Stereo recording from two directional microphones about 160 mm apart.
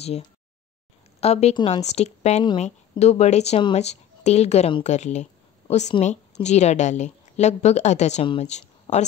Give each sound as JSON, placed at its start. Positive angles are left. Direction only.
{"t": 1.2, "sound": "a woman's voice", "side_deg": 40}